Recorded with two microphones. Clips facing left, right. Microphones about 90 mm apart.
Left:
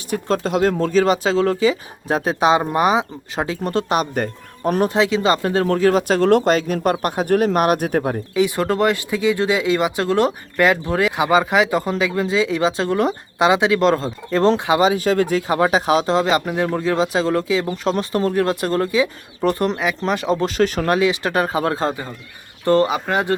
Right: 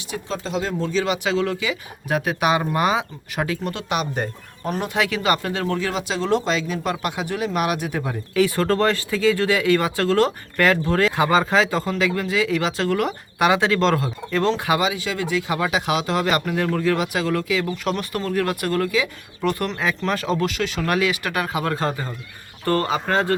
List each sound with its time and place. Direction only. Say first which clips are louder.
0.1 s speech: left 7 dB; 50° left (ahead or behind)
4.1 s speech: left 4 dB; 55° left (ahead or behind)
4.9 s speech: left 4 dB; 25° left (ahead or behind); by 8.2 s 50° left (ahead or behind)
8.4 s speech: even; 20° left (ahead or behind); by 19.7 s 35° left (ahead or behind)
19.7 s speech: left 2 dB; 15° left (ahead or behind)
20.4 s speech: left 5 dB; 35° left (ahead or behind)
20.8 s speech: left 4 dB; 25° left (ahead or behind)